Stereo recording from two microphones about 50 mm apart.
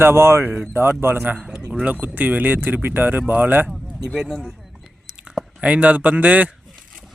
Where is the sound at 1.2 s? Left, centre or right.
Right.